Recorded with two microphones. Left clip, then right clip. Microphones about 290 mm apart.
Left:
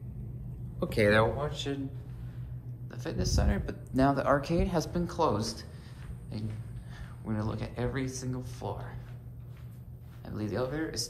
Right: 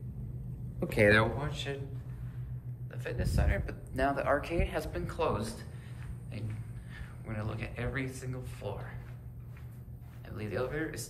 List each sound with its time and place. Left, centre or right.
0.7 s speech: centre
2.9 s speech: centre
7.2 s speech: centre
10.2 s speech: centre